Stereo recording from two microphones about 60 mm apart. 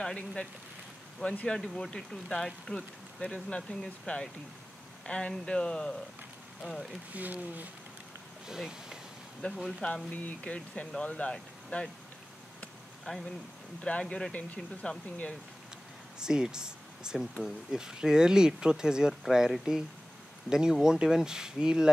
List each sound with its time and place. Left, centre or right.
0.0 s speech: centre
1.6 s speech: centre
7.2 s speech: right
8.5 s speech: centre
9.5 s speech: centre
10.1 s speech: left
13.1 s speech: centre
16.2 s speech: centre